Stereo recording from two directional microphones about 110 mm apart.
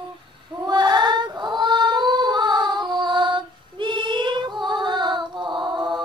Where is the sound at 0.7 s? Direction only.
40° right (ahead or behind).